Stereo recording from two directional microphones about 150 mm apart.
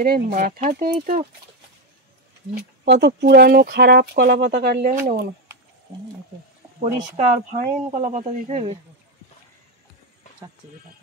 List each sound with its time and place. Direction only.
0.0 s speech: 75° right (ahead or behind)
2.8 s speech: 85° right
6.8 s speech: 55° right (ahead or behind)